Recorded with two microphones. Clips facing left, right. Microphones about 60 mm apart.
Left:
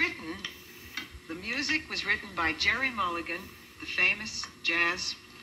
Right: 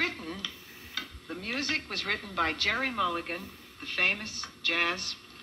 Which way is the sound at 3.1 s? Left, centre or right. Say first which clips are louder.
Even; centre.